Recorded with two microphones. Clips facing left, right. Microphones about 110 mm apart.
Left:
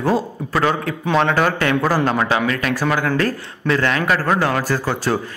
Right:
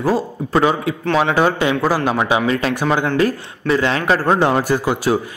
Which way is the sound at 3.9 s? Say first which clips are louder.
Right 2 dB; 25° right (ahead or behind).